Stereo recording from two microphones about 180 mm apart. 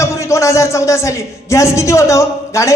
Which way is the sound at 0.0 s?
15° left (ahead or behind).